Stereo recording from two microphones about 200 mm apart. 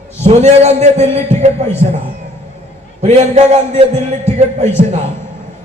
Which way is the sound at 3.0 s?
35° right (ahead or behind).